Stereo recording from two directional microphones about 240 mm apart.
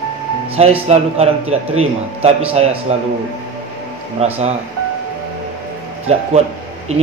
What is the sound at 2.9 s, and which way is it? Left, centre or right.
Speech, right.